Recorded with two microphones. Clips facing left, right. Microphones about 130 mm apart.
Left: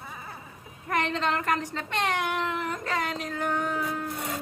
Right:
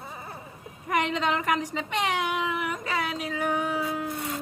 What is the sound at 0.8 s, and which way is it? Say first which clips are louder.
Speech: right 1 dB; 15° right (ahead or behind).